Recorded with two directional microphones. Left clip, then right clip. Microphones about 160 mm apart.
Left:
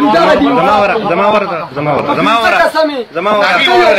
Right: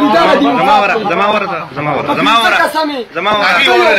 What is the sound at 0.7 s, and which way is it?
Speech, 65° left (ahead or behind).